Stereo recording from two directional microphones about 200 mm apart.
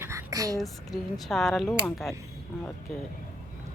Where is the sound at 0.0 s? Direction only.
15° right (ahead or behind).